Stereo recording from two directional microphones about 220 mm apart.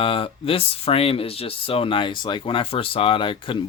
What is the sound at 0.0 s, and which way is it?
Speech, 25° left (ahead or behind).